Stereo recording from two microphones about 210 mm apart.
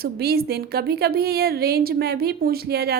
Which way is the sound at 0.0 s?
50° right (ahead or behind).